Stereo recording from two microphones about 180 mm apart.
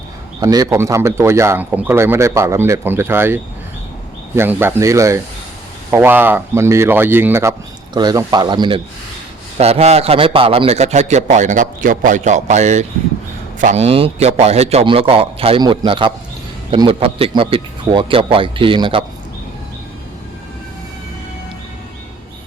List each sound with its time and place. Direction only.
0.3 s a man's voice: 20° right (ahead or behind)